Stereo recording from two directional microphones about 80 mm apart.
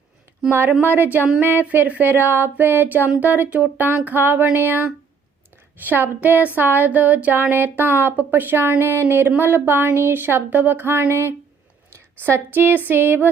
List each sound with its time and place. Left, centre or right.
0.8 s a woman's voice: right